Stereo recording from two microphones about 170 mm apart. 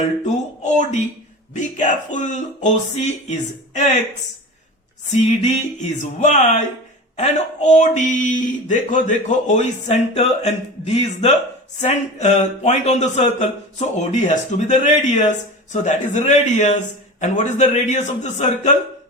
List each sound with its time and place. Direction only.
0.3 s speech: 45° left (ahead or behind)
5.4 s speech: 45° left (ahead or behind)